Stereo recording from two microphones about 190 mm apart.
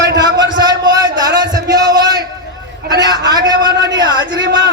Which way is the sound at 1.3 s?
20° right (ahead or behind).